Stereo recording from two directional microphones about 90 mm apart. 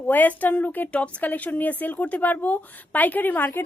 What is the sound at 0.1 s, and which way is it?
A woman's voice, 20° left (ahead or behind).